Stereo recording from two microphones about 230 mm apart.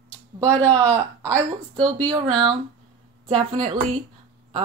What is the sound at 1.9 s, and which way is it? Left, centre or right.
Speech, centre.